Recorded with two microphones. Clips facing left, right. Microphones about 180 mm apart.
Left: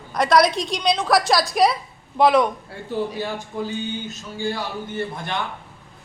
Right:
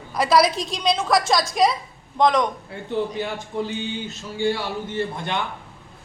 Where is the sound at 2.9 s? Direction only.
20° right (ahead or behind).